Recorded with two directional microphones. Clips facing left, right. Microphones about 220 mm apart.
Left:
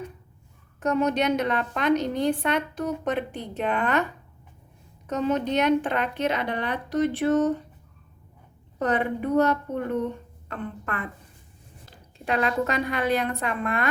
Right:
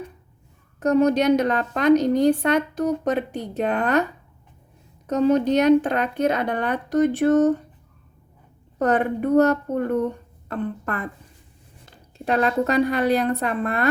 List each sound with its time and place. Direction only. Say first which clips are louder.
0.8 s a woman's voice: right 6 dB; 40° right (ahead or behind)
5.0 s a woman's voice: right 7 dB; 40° right (ahead or behind)
8.8 s a woman's voice: right 4 dB; 45° right (ahead or behind)
12.2 s a woman's voice: right 4 dB; 40° right (ahead or behind)